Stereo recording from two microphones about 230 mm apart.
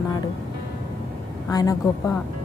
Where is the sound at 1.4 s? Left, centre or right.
Centre.